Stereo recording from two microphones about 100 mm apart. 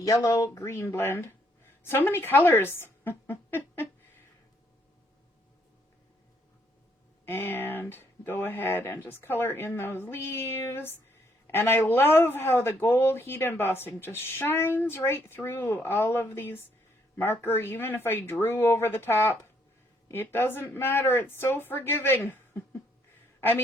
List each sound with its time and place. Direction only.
0.0 s speech: 40° left (ahead or behind); by 3.8 s 20° left (ahead or behind)
7.3 s a woman's voice: 20° left (ahead or behind)